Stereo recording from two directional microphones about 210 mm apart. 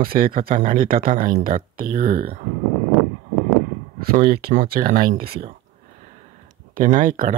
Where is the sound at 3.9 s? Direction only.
45° right (ahead or behind).